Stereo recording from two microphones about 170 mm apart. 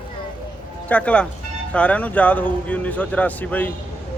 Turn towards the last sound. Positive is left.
turn(degrees=10)  # may be behind; listen again after turning